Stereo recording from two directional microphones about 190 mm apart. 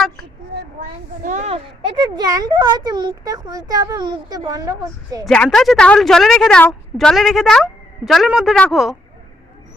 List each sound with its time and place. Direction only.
0.8 s a child's voice: 40° right (ahead or behind); by 5.2 s 20° right (ahead or behind)
5.2 s a woman's voice: 5° left (ahead or behind)